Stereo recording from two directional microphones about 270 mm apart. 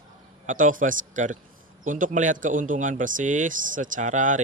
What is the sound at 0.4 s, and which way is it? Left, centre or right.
Speech, right.